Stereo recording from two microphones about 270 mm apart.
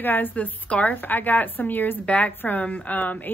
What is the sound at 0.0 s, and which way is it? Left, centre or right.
A woman's voice, centre.